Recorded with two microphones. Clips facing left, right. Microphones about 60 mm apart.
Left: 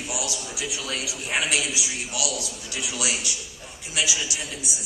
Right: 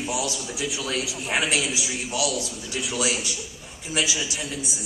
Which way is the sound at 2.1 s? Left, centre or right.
Right.